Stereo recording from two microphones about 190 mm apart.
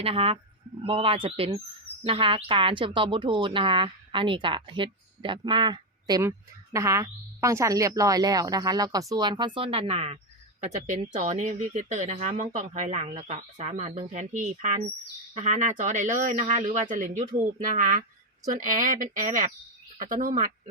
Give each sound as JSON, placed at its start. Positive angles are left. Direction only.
{"t": 0.0, "sound": "speech", "side_deg": -30}